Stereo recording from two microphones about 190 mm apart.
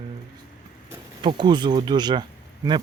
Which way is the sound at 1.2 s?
25° right (ahead or behind).